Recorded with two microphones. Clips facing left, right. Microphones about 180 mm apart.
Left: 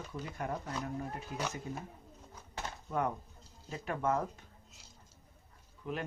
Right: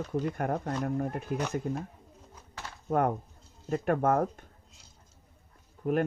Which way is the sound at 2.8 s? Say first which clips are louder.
Right 8 dB; 55° right (ahead or behind).